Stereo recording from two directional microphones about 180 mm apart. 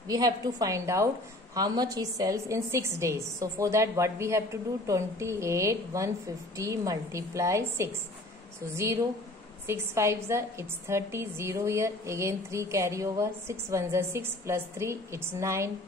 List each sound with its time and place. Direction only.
0.1 s a woman's voice: 20° right (ahead or behind)